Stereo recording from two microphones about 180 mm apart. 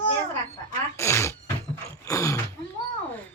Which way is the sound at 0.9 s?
15° left (ahead or behind).